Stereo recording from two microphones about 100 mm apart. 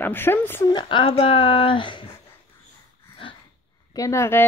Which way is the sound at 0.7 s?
55° left (ahead or behind).